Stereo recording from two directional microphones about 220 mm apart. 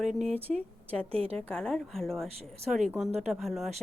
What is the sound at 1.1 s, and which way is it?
Speech, 25° right (ahead or behind).